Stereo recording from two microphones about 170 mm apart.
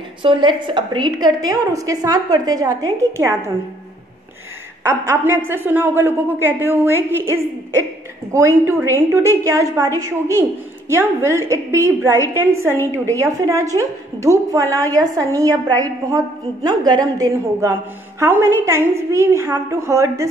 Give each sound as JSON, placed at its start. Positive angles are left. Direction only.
{"t": 0.2, "sound": "a woman's voice", "side_deg": -30}
{"t": 4.8, "sound": "a woman's voice", "side_deg": -15}